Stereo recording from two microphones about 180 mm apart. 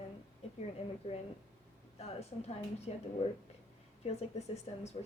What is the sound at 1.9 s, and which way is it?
A woman's voice, 35° left (ahead or behind).